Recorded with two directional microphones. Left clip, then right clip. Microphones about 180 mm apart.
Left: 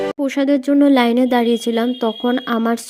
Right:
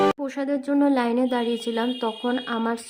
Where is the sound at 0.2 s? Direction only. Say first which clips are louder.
Left 9 dB; 35° left (ahead or behind).